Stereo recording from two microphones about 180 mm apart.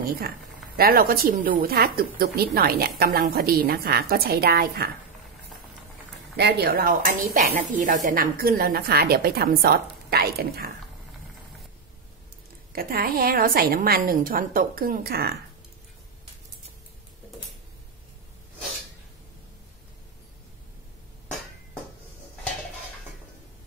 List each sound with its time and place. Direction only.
0.0 s a woman's voice: 55° right (ahead or behind)
6.3 s speech: 65° right (ahead or behind)
12.7 s a woman's voice: 55° right (ahead or behind)